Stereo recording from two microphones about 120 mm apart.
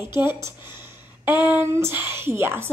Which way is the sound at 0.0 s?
20° right (ahead or behind).